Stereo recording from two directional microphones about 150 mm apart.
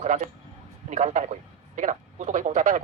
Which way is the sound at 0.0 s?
50° right (ahead or behind).